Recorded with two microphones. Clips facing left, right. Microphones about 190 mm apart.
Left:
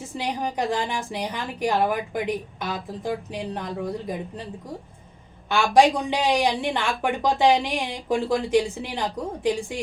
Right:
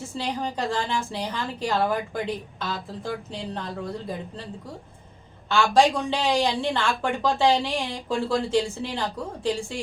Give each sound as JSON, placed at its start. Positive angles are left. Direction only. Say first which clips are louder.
{"t": 0.0, "sound": "a woman's voice", "louder": "left 1 dB", "side_deg": 15}
{"t": 5.5, "sound": "a woman's voice", "louder": "left 2 dB", "side_deg": 15}